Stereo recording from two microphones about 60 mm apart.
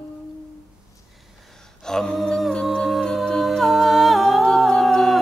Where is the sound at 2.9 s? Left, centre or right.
Centre.